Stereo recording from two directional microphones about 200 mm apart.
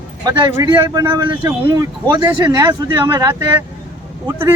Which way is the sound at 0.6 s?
20° right (ahead or behind).